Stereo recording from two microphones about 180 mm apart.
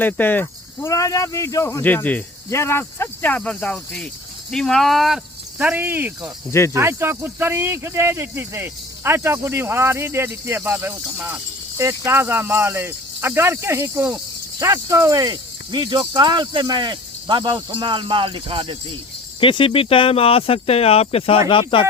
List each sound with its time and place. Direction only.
0.0 s speech: 10° left (ahead or behind); by 18.8 s 30° right (ahead or behind)
19.4 s speech: 30° left (ahead or behind)